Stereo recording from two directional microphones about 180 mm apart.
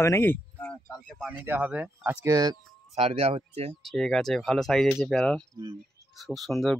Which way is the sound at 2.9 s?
35° right (ahead or behind).